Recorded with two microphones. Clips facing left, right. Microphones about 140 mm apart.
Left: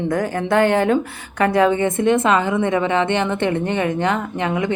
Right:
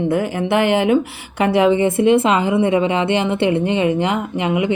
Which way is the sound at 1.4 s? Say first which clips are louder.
Right 2 dB; 15° right (ahead or behind).